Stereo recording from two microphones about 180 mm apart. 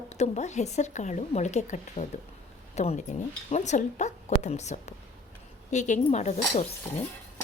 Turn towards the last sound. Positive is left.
turn(degrees=35)  # may be behind; listen again after turning